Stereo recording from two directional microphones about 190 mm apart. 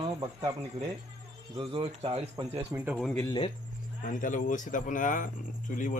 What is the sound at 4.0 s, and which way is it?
A man's voice, 45° left (ahead or behind).